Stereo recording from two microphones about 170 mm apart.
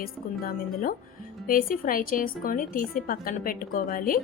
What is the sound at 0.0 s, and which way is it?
A woman's voice, 55° left (ahead or behind).